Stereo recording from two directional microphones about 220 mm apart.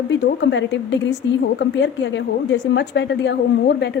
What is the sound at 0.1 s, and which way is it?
A woman's voice, 55° left (ahead or behind).